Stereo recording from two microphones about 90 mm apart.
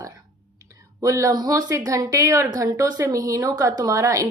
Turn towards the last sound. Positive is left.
turn(degrees=-40)  # may be behind; listen again after turning